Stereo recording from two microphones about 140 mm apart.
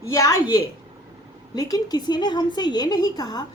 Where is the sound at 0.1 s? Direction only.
25° left (ahead or behind).